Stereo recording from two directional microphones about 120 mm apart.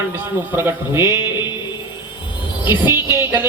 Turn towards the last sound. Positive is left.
turn(degrees=-20)  # may be behind; listen again after turning